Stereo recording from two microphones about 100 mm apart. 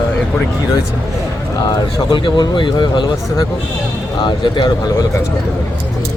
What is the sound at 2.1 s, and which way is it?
Speech, 55° left (ahead or behind).